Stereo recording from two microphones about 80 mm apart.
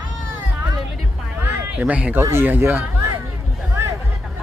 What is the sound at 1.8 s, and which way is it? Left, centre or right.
Speech, centre.